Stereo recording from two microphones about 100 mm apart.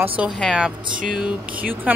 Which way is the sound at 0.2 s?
Centre (ahead or behind).